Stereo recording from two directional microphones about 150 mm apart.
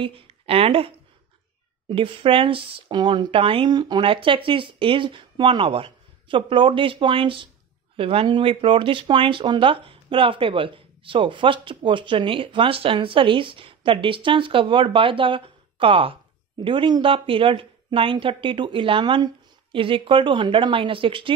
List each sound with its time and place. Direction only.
0.0 s a woman's voice: 35° right (ahead or behind)